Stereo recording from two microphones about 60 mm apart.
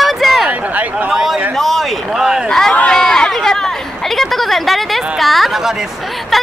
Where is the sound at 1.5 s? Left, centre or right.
Centre.